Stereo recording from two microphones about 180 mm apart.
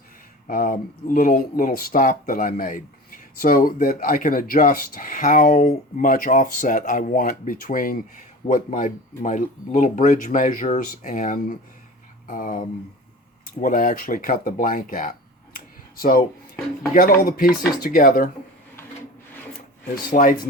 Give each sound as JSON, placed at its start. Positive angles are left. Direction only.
{"t": 0.4, "sound": "speech", "side_deg": 50}
{"t": 15.5, "sound": "a sound", "side_deg": 55}
{"t": 16.9, "sound": "speech", "side_deg": 50}
{"t": 20.1, "sound": "speech", "side_deg": 50}